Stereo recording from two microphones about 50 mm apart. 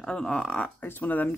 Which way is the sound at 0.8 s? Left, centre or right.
Left.